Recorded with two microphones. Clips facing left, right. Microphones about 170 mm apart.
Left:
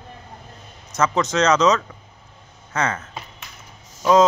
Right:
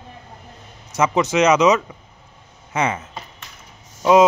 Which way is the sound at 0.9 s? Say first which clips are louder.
Right 2 dB; 10° right (ahead or behind).